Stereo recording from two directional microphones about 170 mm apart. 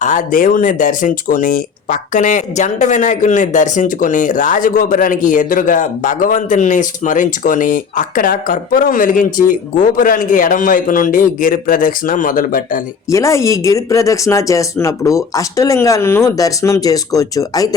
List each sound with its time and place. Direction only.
0.0 s speech: 50° left (ahead or behind)
13.1 s speech: 15° left (ahead or behind)